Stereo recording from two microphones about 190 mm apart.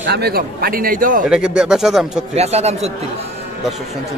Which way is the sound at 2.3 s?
35° right (ahead or behind).